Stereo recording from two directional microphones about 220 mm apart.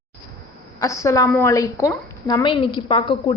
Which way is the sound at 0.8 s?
15° left (ahead or behind).